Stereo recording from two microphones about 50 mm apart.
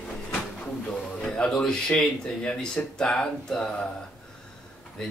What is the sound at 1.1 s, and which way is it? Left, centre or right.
Speech, centre.